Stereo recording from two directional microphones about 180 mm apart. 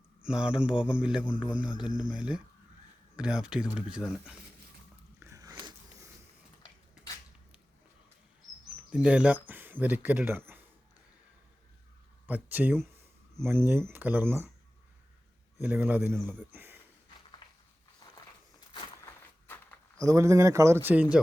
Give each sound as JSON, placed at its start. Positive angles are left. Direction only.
{"t": 0.2, "sound": "a man's voice", "side_deg": -5}
{"t": 5.2, "sound": "biting", "side_deg": -20}
{"t": 8.9, "sound": "speech", "side_deg": -5}
{"t": 12.2, "sound": "speech", "side_deg": -10}
{"t": 15.6, "sound": "speech", "side_deg": -10}
{"t": 17.4, "sound": "a sound", "side_deg": 25}
{"t": 20.0, "sound": "speech", "side_deg": -20}